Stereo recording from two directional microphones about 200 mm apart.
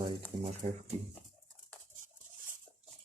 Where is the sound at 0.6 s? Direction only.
30° right (ahead or behind).